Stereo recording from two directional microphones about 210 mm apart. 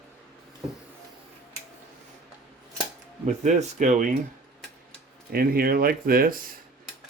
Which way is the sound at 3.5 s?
35° right (ahead or behind).